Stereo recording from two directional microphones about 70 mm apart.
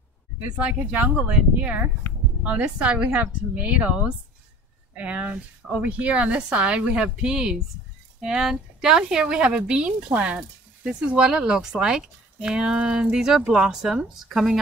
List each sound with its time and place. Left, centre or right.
0.6 s speech: right; by 14.6 s centre